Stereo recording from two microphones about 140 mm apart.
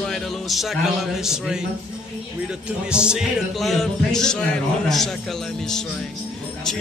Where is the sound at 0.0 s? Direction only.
5° left (ahead or behind).